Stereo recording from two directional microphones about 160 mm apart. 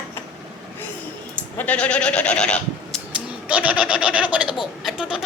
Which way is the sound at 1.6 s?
10° left (ahead or behind).